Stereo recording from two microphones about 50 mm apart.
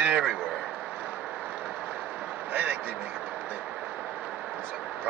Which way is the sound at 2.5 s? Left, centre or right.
Right.